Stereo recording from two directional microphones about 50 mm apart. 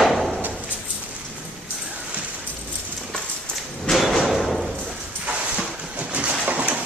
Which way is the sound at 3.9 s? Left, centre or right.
Centre.